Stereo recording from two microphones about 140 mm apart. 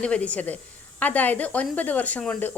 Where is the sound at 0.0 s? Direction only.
10° left (ahead or behind).